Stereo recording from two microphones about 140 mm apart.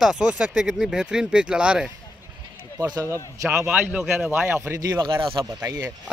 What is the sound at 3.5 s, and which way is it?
Speech, 15° right (ahead or behind).